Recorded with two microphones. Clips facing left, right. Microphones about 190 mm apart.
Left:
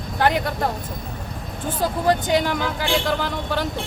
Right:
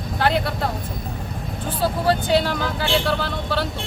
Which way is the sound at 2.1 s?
15° left (ahead or behind).